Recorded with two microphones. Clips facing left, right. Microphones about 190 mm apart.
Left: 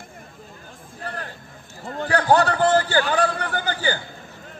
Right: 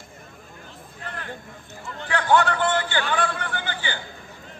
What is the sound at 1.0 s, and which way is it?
Hubbub, 40° left (ahead or behind).